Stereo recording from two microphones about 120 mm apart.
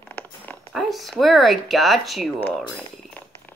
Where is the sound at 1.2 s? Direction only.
Centre (ahead or behind).